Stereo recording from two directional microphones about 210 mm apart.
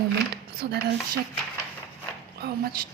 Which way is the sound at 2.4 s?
50° right (ahead or behind).